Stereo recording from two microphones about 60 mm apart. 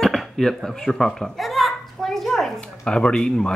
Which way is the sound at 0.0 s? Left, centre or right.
Centre.